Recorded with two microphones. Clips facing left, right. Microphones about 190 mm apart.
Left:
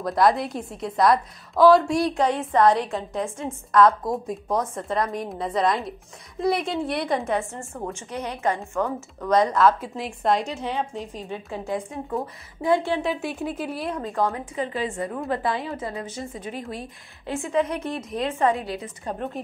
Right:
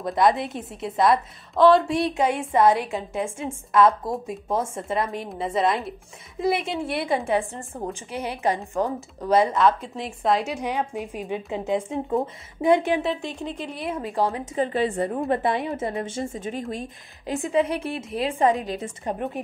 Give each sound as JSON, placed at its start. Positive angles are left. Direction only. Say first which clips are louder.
{"t": 0.0, "sound": "a woman's voice", "louder": "even", "side_deg": 0}
{"t": 7.7, "sound": "speech", "louder": "right 1 dB", "side_deg": -30}
{"t": 8.1, "sound": "a woman's voice", "louder": "right 1 dB", "side_deg": -10}
{"t": 8.7, "sound": "speech", "louder": "right 1 dB", "side_deg": -35}
{"t": 9.3, "sound": "a woman's voice", "louder": "even", "side_deg": -5}
{"t": 13.0, "sound": "a woman's voice", "louder": "left 1 dB", "side_deg": 5}
{"t": 14.4, "sound": "a woman's voice", "louder": "right 4 dB", "side_deg": -40}
{"t": 17.3, "sound": "a woman's voice", "louder": "right 2 dB", "side_deg": -15}
{"t": 17.6, "sound": "a woman's voice", "louder": "right 1 dB", "side_deg": -30}
{"t": 18.4, "sound": "a woman's voice", "louder": "right 2 dB", "side_deg": -20}